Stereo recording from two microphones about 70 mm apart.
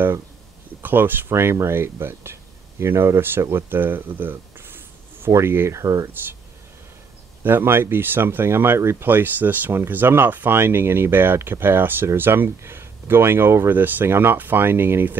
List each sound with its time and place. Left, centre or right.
0.8 s speech: right
7.4 s speech: right